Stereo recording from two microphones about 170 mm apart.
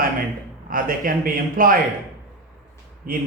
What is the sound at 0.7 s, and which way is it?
A man's voice, 55° right (ahead or behind).